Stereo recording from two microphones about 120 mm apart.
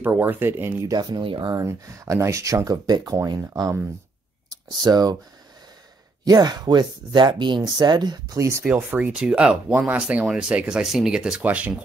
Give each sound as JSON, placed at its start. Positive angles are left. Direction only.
{"t": 0.0, "sound": "speech", "side_deg": -15}
{"t": 0.9, "sound": "speech", "side_deg": -35}
{"t": 1.6, "sound": "speech", "side_deg": -25}
{"t": 6.2, "sound": "speech", "side_deg": -35}
{"t": 8.6, "sound": "speech", "side_deg": -15}